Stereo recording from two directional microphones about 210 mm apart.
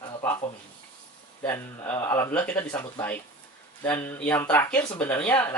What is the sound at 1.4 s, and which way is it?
Speech, 10° left (ahead or behind).